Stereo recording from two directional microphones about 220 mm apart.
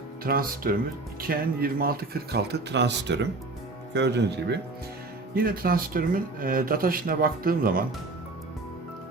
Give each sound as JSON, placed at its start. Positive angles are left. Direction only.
{"t": 0.3, "sound": "speech", "side_deg": -40}